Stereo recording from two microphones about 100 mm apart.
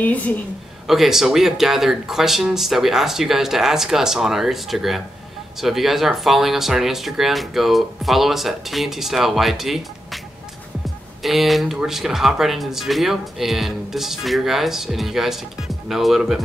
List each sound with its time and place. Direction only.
0.0 s a woman's voice: 15° left (ahead or behind)
0.8 s speech: 5° right (ahead or behind)
11.2 s speech: centre (ahead or behind)